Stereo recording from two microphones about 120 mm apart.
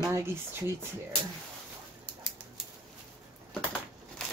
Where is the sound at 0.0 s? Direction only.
20° right (ahead or behind).